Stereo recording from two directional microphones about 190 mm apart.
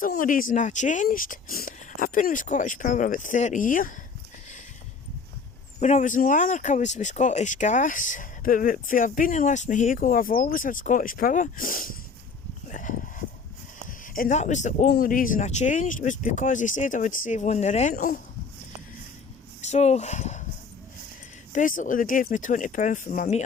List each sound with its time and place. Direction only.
0.0 s speech: 45° left (ahead or behind)
5.8 s speech: 40° left (ahead or behind)
12.7 s a sound: 45° left (ahead or behind)
13.8 s speech: 45° left (ahead or behind)
19.6 s speech: 35° left (ahead or behind)
21.5 s speech: 45° left (ahead or behind)